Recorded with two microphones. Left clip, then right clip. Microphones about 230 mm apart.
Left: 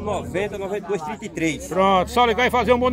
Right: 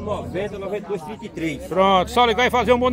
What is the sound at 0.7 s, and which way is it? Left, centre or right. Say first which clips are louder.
Speech: left 2 dB; left.